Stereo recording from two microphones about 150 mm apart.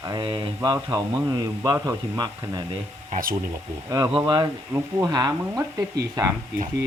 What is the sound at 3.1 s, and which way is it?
Speech, 70° right (ahead or behind).